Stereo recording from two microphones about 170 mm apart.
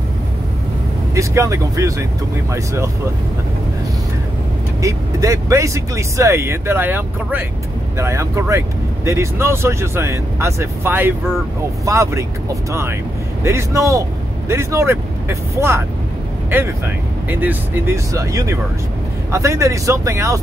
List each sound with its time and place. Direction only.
1.1 s speech: 20° right (ahead or behind)
4.8 s speech: 20° right (ahead or behind)
13.4 s speech: 15° right (ahead or behind)